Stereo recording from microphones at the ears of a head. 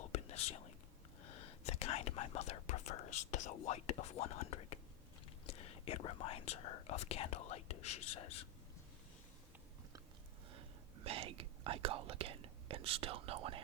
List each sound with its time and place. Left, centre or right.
0.0 s whispering: left
1.2 s speech: left
11.0 s speech: right